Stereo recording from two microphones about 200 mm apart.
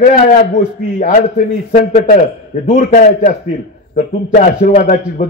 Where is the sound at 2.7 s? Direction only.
35° left (ahead or behind).